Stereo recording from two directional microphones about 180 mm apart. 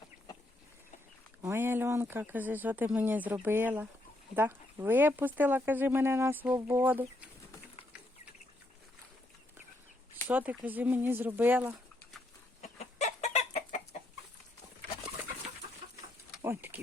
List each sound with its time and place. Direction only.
1.4 s speech: 10° right (ahead or behind)
10.2 s speech: 5° right (ahead or behind)
12.6 s chicken: 40° left (ahead or behind)
16.4 s a sound: 15° right (ahead or behind)